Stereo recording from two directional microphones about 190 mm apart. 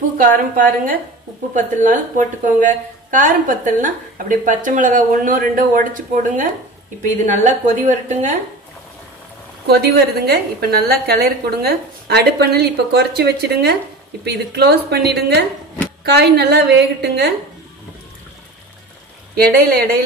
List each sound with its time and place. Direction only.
0.2 s a woman's voice: 45° right (ahead or behind)
9.7 s a woman's voice: 55° right (ahead or behind)
19.5 s a woman's voice: 50° right (ahead or behind)